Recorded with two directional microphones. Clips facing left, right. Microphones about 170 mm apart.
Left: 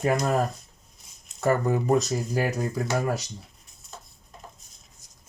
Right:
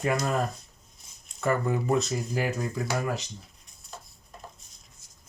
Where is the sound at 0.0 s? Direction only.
35° left (ahead or behind).